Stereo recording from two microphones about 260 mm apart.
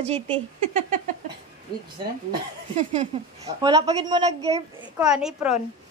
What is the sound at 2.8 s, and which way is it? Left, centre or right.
Speech, right.